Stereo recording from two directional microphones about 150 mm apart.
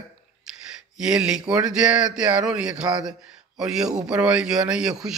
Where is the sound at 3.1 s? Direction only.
5° right (ahead or behind).